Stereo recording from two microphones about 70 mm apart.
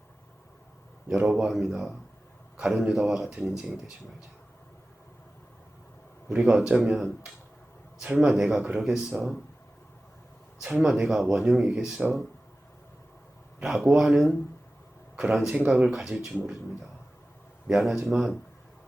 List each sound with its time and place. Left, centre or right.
1.2 s speech: centre
6.3 s speech: centre
8.0 s speech: centre
8.3 s speech: centre
10.8 s speech: centre
13.6 s speech: centre
17.7 s speech: centre